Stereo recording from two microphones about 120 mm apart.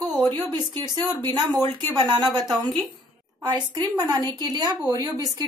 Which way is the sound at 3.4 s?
35° right (ahead or behind).